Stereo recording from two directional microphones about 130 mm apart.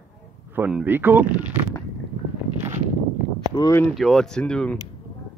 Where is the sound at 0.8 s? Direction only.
15° right (ahead or behind).